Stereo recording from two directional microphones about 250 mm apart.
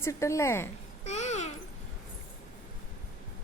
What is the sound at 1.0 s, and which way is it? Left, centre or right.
Babbling, left.